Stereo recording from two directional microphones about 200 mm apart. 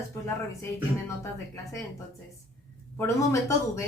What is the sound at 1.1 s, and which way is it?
Speech, 15° left (ahead or behind).